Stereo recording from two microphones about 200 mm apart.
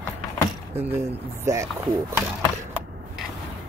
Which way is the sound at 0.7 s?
15° right (ahead or behind).